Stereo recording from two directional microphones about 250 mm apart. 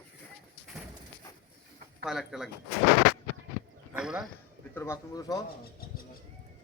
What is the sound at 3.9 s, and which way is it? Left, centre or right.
Speech, centre.